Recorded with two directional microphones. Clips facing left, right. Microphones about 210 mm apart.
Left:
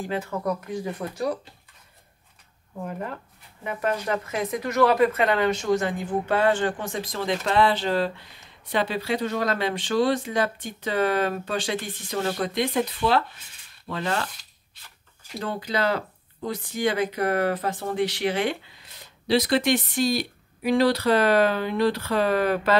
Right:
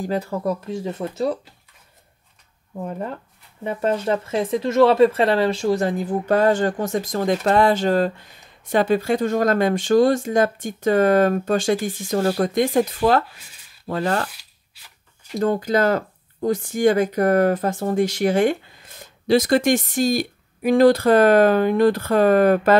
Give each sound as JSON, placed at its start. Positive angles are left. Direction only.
{"t": 0.0, "sound": "speech", "side_deg": -35}
{"t": 3.6, "sound": "speech", "side_deg": -30}
{"t": 15.3, "sound": "speech", "side_deg": -45}